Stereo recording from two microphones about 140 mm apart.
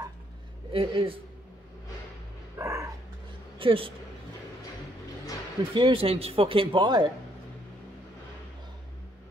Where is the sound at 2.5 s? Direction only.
20° right (ahead or behind).